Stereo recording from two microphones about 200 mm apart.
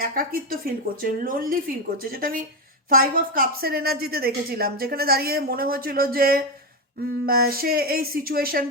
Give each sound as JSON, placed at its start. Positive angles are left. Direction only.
{"t": 0.0, "sound": "a woman's voice", "side_deg": -45}